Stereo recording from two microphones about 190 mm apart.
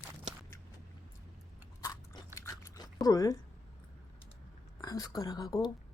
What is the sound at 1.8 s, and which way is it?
Biting, 20° left (ahead or behind).